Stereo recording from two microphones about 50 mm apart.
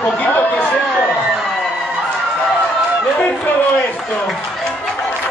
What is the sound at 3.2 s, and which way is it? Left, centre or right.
Speech, left.